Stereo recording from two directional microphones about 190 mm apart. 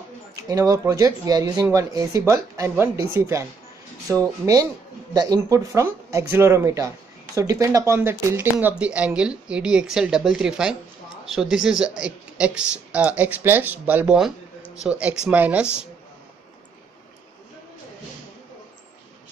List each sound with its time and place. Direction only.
0.4 s speech: 15° right (ahead or behind)